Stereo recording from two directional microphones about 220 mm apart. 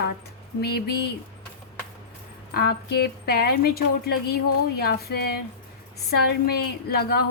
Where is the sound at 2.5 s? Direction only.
45° left (ahead or behind).